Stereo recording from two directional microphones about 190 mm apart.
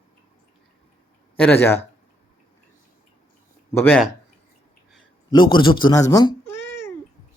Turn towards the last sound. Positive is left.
turn(degrees=10)  # may be behind; listen again after turning